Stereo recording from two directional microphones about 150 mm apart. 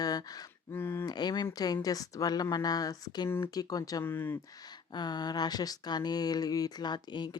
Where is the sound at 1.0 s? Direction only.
30° left (ahead or behind).